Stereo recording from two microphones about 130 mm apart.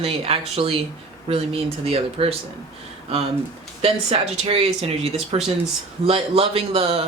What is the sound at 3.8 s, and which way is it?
Speech, 50° right (ahead or behind).